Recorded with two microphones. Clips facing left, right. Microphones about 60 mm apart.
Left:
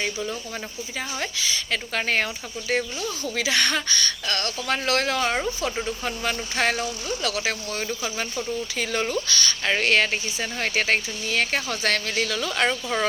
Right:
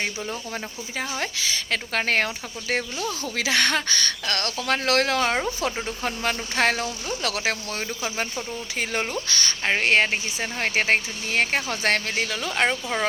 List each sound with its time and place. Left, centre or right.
0.9 s speech: right